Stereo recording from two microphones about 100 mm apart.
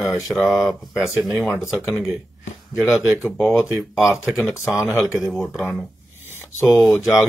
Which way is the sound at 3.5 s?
30° left (ahead or behind).